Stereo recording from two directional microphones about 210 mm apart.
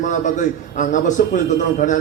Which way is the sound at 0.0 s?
35° left (ahead or behind).